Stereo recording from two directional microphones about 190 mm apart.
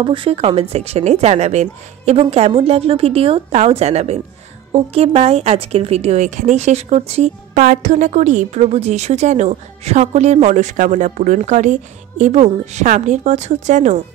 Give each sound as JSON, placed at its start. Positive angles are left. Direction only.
{"t": 0.0, "sound": "speech", "side_deg": -25}